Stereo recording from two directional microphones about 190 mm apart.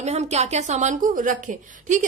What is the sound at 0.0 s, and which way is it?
A woman's voice, 35° right (ahead or behind).